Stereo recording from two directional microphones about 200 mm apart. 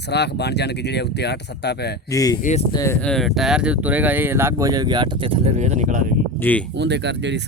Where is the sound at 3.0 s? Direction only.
Centre (ahead or behind); by 6.0 s 35° right (ahead or behind).